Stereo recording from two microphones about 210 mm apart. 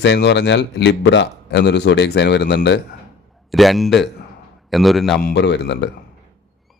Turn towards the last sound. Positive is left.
turn(degrees=55)  # may be behind; listen again after turning